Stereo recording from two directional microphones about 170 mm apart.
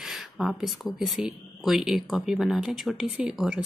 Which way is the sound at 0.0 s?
Centre (ahead or behind).